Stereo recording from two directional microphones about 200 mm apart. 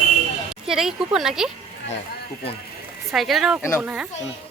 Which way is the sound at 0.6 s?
Centre (ahead or behind).